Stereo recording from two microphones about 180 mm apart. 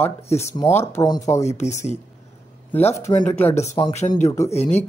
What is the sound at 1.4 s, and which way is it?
Speech, 40° left (ahead or behind).